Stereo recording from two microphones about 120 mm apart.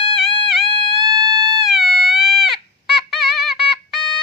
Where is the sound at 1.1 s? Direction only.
35° right (ahead or behind).